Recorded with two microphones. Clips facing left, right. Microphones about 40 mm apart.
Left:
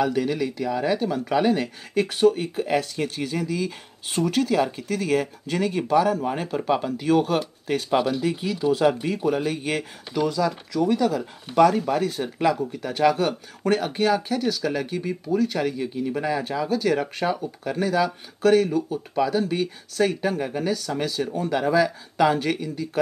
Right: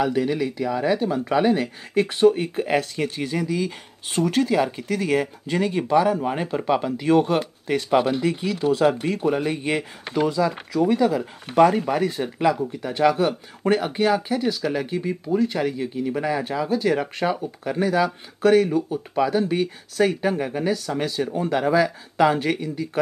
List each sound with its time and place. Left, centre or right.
0.0 s speech: centre
2.0 s speech: right
3.5 s speech: right
4.2 s speech: right; by 8.0 s centre
8.0 s speech: right
9.3 s speech: right
12.4 s speech: centre